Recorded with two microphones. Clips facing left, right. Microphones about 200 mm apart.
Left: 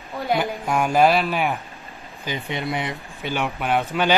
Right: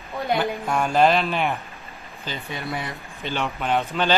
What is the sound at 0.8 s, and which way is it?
Speech, 10° left (ahead or behind).